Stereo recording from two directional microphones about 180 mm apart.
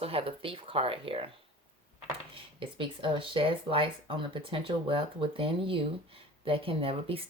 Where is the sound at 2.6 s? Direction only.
30° right (ahead or behind).